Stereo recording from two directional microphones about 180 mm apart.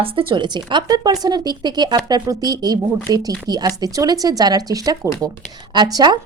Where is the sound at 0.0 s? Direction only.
30° right (ahead or behind).